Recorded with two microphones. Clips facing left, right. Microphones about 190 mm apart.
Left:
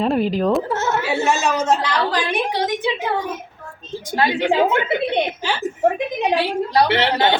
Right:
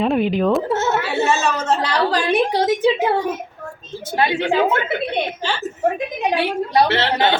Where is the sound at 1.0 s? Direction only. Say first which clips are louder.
Even; 15° left (ahead or behind).